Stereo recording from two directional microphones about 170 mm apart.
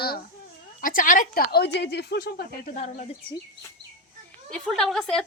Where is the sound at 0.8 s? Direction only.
55° left (ahead or behind); by 2.4 s 70° left (ahead or behind).